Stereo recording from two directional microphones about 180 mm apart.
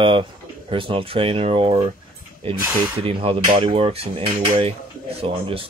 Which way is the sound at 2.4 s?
30° right (ahead or behind).